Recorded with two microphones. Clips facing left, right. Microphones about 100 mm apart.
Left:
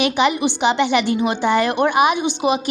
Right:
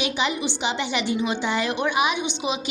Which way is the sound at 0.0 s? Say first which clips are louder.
Left 8 dB; 60° left (ahead or behind).